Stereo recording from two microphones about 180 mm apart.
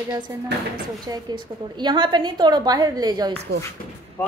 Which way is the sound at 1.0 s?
25° right (ahead or behind).